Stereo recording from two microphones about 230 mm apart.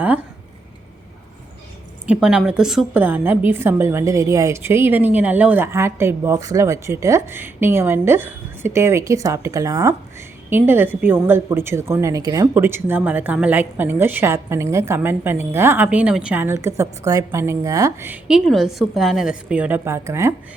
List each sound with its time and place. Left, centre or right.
2.0 s a woman's voice: centre